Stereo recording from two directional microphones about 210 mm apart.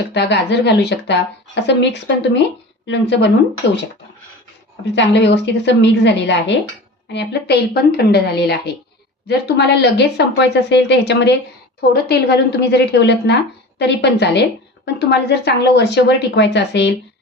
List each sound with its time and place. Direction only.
0.1 s a woman's voice: 55° left (ahead or behind)
4.9 s a woman's voice: 60° left (ahead or behind)